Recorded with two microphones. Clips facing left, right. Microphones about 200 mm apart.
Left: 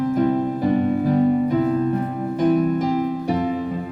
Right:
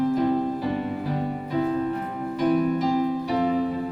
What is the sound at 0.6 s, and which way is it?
Music, 50° left (ahead or behind).